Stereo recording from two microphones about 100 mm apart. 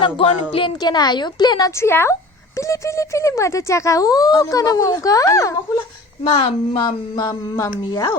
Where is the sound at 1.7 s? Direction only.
25° left (ahead or behind).